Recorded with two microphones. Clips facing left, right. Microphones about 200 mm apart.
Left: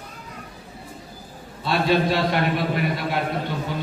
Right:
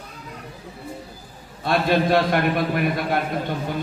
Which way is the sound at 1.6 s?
50° right (ahead or behind).